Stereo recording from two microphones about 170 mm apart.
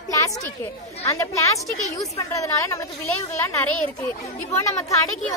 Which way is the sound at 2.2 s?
20° left (ahead or behind).